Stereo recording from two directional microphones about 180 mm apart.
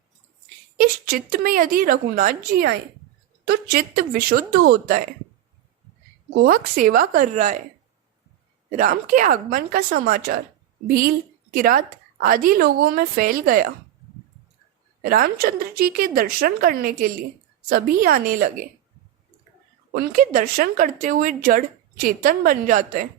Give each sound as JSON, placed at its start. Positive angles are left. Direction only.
{"t": 0.8, "sound": "speech", "side_deg": -50}
{"t": 3.4, "sound": "speech", "side_deg": -65}
{"t": 6.3, "sound": "speech", "side_deg": -55}
{"t": 8.7, "sound": "speech", "side_deg": -45}
{"t": 11.5, "sound": "speech", "side_deg": -55}
{"t": 15.0, "sound": "speech", "side_deg": -55}
{"t": 19.9, "sound": "speech", "side_deg": -55}